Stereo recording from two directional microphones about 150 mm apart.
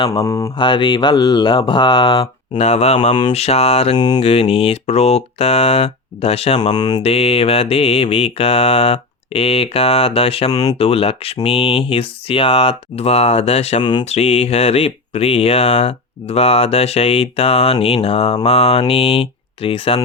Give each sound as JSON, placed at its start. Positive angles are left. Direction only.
{"t": 0.0, "sound": "mantra", "side_deg": 35}
{"t": 0.3, "sound": "mantra", "side_deg": 20}
{"t": 0.5, "sound": "mantra", "side_deg": 30}
{"t": 2.6, "sound": "speech", "side_deg": 45}
{"t": 3.9, "sound": "mantra", "side_deg": 30}
{"t": 4.2, "sound": "speech", "side_deg": 40}
{"t": 6.7, "sound": "mantra", "side_deg": 25}
{"t": 7.0, "sound": "mantra", "side_deg": 40}
{"t": 10.5, "sound": "mantra", "side_deg": 25}
{"t": 10.8, "sound": "mantra", "side_deg": 40}
{"t": 11.9, "sound": "speech", "side_deg": 40}
{"t": 18.4, "sound": "mantra", "side_deg": 45}